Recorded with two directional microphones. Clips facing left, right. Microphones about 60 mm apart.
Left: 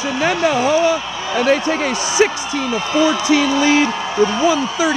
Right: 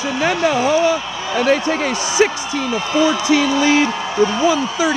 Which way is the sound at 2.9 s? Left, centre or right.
Left.